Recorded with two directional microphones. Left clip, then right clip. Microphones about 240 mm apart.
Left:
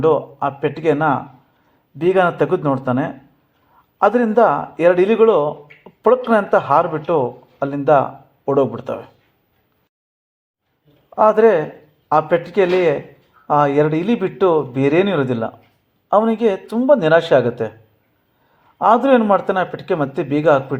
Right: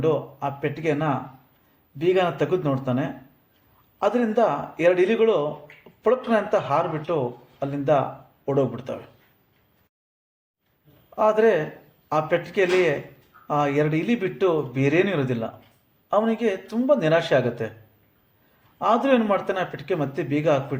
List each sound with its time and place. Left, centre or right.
0.0 s speech: left
11.1 s speech: centre
18.8 s speech: centre